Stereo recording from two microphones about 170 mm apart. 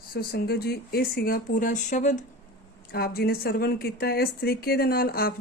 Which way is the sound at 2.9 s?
65° left (ahead or behind).